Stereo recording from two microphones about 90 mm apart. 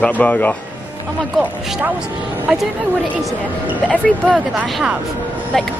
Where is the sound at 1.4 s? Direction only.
15° right (ahead or behind).